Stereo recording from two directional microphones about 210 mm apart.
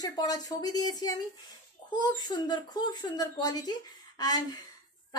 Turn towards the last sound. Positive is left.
turn(degrees=20)  # may be behind; listen again after turning